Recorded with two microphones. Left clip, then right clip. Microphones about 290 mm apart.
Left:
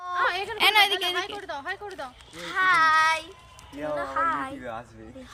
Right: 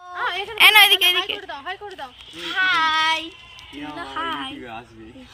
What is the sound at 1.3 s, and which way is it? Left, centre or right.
Speech, centre.